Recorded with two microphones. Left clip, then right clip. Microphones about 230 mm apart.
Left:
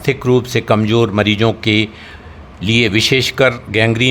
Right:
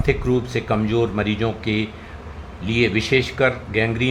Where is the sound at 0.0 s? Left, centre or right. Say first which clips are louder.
Left 6 dB; left.